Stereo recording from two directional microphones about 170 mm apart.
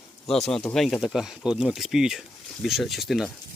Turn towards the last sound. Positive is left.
turn(degrees=0)  # may be behind; listen again after turning